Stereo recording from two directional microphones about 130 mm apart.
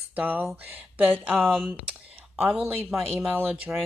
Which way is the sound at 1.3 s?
5° left (ahead or behind).